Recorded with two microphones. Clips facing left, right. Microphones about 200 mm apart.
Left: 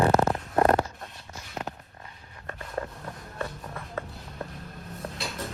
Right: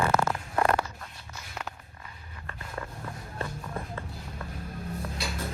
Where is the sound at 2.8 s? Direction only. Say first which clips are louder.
Left 6 dB; 40° left (ahead or behind).